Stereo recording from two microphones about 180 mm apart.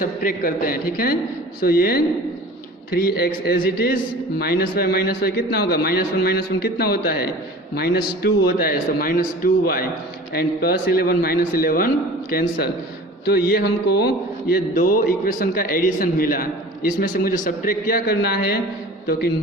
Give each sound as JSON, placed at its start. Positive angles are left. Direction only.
{"t": 0.0, "sound": "a man's voice", "side_deg": 50}